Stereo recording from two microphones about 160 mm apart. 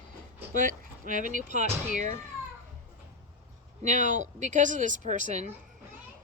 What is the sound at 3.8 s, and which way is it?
Speech, 50° right (ahead or behind).